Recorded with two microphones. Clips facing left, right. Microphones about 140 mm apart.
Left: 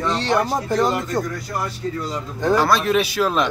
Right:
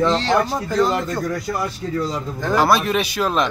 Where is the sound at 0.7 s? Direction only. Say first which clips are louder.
Right 2 dB; 15° left (ahead or behind).